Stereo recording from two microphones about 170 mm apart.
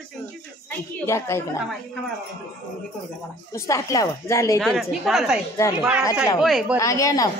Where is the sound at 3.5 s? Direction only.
20° left (ahead or behind).